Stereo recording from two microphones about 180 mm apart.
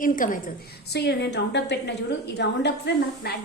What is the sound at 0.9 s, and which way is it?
A woman's voice, 65° left (ahead or behind).